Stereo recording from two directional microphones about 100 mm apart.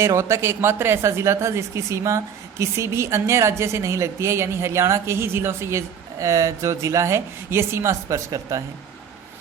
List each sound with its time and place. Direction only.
0.0 s a woman's voice: 25° right (ahead or behind)